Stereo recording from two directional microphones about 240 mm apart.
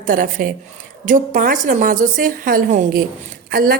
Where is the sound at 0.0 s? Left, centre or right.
Right.